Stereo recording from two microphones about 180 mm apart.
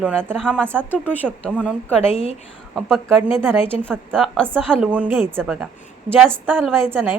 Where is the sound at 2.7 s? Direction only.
Centre (ahead or behind).